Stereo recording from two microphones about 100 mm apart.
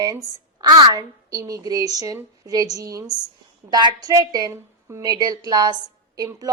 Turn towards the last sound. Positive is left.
turn(degrees=-35)  # may be behind; listen again after turning